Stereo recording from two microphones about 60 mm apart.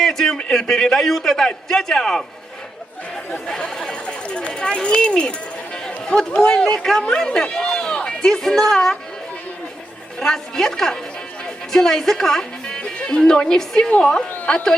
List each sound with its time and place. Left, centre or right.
0.0 s a man's voice: centre
3.4 s a man's voice: centre
10.2 s a man's voice: centre